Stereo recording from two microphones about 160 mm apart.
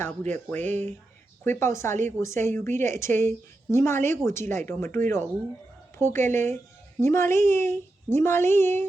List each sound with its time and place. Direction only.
0.0 s a woman's voice: 10° left (ahead or behind)